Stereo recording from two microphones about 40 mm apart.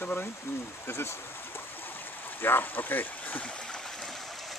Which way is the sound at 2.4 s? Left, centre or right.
Left.